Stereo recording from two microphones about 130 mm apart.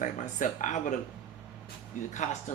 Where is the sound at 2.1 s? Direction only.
70° left (ahead or behind).